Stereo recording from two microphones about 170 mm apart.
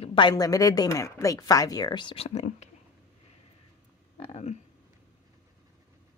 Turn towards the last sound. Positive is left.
turn(degrees=40)  # may be behind; listen again after turning